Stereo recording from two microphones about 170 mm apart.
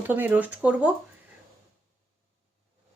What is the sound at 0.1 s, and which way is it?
Speech, 10° right (ahead or behind).